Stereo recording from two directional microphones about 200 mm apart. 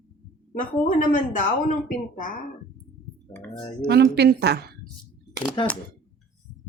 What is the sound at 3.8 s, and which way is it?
Speech, 55° right (ahead or behind).